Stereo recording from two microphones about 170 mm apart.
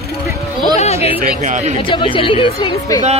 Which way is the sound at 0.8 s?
40° left (ahead or behind).